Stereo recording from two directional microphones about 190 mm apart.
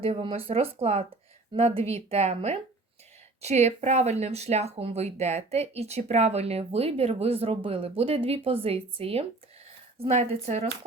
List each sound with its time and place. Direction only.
0.0 s speech: 30° right (ahead or behind)